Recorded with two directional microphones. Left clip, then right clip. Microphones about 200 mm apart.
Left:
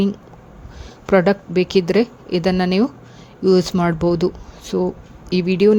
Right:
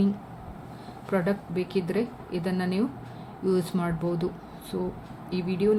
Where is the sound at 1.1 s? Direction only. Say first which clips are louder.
Left 13 dB; 45° left (ahead or behind).